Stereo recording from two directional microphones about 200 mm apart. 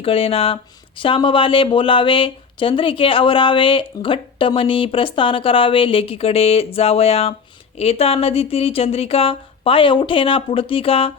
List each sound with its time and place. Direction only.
0.0 s speech: 30° left (ahead or behind)